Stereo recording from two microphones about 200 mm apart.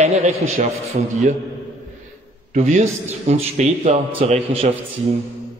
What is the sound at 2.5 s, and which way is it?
A man's voice, 35° right (ahead or behind).